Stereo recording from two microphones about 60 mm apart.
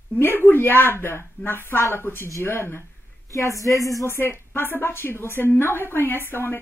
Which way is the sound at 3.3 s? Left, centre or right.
Left.